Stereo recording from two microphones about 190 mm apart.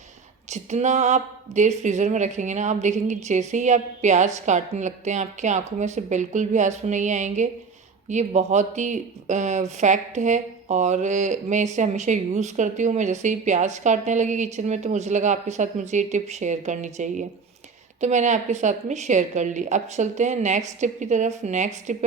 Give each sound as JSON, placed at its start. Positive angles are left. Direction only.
{"t": 0.4, "sound": "speech", "side_deg": -35}